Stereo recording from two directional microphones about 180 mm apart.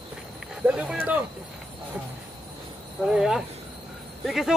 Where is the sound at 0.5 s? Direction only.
5° right (ahead or behind).